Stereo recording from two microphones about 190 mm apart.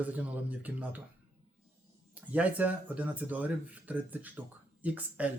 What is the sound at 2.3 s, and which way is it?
A man's voice, 10° right (ahead or behind).